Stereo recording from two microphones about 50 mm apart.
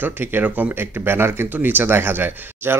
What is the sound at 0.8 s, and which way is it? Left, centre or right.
Speech, right.